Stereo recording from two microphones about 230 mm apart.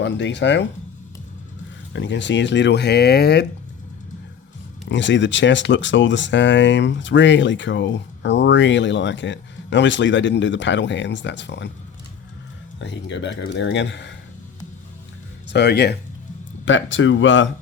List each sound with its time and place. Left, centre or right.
0.0 s speech: left
1.9 s speech: left
4.9 s speech: left
12.8 s speech: left
15.5 s speech: left